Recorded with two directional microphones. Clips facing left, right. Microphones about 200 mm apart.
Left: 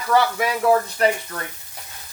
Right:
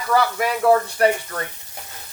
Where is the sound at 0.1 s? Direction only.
Centre (ahead or behind).